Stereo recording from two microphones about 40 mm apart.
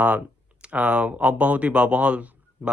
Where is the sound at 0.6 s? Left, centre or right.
Right.